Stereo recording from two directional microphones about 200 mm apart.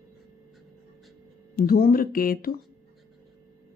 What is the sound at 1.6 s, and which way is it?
Speech, 50° left (ahead or behind).